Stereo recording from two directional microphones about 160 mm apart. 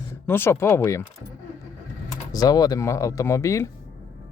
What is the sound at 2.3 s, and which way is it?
Speech, 25° left (ahead or behind).